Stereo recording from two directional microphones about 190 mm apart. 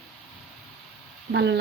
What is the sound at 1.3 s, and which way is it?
Speech, 65° right (ahead or behind).